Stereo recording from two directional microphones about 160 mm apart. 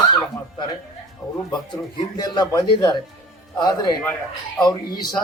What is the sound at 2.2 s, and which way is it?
Speech, 25° left (ahead or behind).